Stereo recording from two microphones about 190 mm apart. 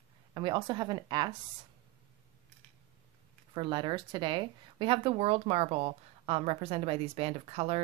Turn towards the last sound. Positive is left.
turn(degrees=-30)  # may be behind; listen again after turning